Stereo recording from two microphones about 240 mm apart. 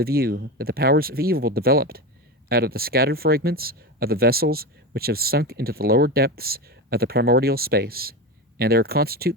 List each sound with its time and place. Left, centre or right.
0.0 s speech: right